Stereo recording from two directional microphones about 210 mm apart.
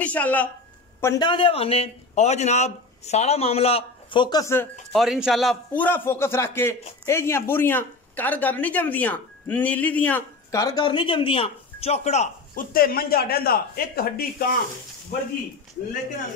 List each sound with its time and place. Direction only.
0.0 s a woman's voice: 5° left (ahead or behind)
1.0 s a man's voice: 20° left (ahead or behind)
4.9 s speech: centre (ahead or behind); by 14.5 s 45° left (ahead or behind)